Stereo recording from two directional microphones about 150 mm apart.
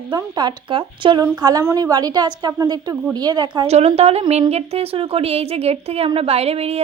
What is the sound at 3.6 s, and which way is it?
A woman's voice, 45° right (ahead or behind).